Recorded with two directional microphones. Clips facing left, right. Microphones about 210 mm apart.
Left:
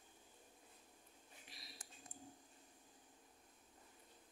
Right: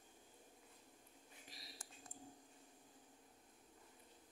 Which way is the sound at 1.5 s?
40° right (ahead or behind).